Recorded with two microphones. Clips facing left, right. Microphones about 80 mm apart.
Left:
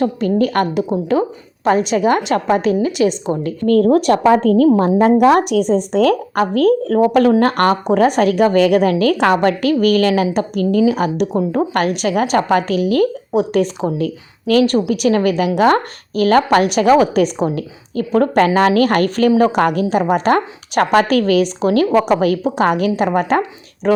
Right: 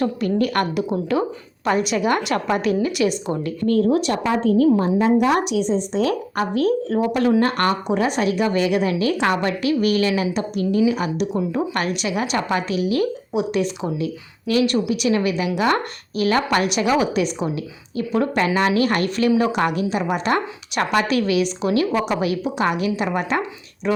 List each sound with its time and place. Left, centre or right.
0.0 s a woman's voice: left
3.7 s a woman's voice: left